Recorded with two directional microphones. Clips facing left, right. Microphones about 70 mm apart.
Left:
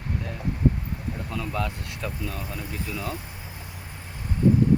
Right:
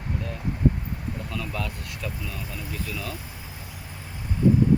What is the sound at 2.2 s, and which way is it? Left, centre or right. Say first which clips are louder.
Speech: left 2 dB; left.